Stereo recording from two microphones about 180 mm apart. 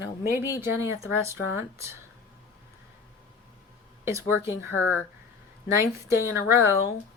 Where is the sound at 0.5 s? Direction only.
15° right (ahead or behind).